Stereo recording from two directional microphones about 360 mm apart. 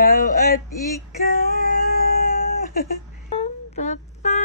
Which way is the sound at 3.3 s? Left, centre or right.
Centre.